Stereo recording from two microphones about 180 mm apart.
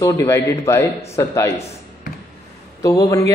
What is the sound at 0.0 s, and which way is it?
A man's voice, 15° left (ahead or behind).